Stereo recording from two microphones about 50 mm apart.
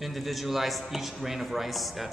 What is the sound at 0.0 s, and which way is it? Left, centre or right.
A man's voice, centre.